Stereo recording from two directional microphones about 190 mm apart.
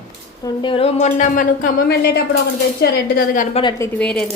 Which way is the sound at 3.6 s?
30° left (ahead or behind).